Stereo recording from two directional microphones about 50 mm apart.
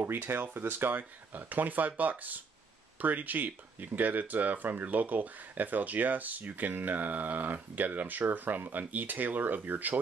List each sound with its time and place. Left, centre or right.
0.0 s speech: right